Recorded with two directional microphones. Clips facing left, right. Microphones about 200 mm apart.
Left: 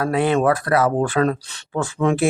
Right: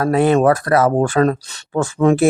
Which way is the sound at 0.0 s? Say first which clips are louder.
Right 4 dB; 45° right (ahead or behind).